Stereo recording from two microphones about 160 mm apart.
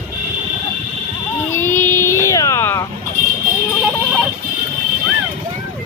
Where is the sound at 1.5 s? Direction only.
15° left (ahead or behind).